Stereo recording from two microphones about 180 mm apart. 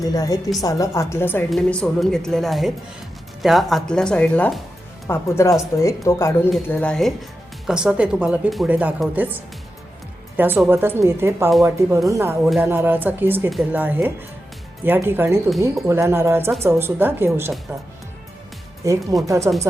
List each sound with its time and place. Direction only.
0.0 s a woman's voice: 20° left (ahead or behind); by 17.5 s 15° right (ahead or behind)
18.8 s speech: 15° right (ahead or behind)